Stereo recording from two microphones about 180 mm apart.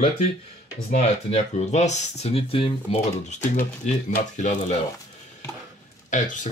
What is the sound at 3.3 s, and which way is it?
Speech, 45° left (ahead or behind).